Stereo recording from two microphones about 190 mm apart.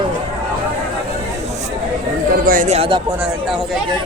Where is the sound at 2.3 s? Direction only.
50° right (ahead or behind); by 3.0 s 30° right (ahead or behind).